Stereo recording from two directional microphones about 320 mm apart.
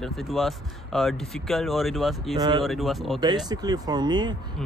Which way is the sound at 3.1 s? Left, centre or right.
Centre.